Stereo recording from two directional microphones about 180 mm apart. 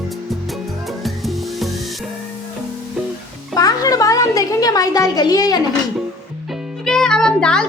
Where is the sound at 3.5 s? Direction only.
20° left (ahead or behind).